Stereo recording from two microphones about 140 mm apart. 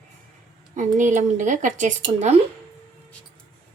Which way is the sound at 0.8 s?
65° right (ahead or behind).